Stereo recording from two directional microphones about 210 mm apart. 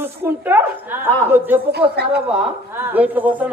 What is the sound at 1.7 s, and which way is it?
Speech, 50° right (ahead or behind).